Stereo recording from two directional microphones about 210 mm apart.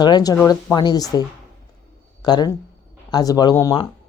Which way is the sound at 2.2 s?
20° left (ahead or behind).